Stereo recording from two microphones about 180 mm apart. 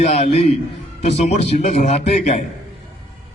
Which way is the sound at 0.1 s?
35° left (ahead or behind).